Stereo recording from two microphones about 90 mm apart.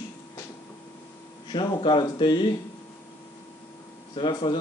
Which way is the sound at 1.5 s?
65° left (ahead or behind).